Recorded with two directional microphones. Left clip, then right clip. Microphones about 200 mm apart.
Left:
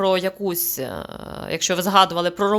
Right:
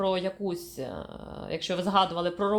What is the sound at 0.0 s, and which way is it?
Speech, 35° left (ahead or behind).